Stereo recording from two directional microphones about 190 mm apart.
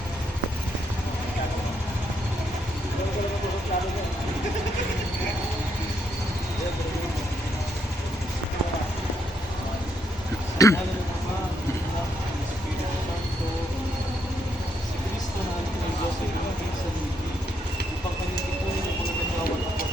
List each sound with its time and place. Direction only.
10.6 s vehicle: 15° left (ahead or behind)